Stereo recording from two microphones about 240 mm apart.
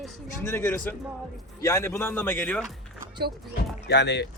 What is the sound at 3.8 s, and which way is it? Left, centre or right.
Speech, left.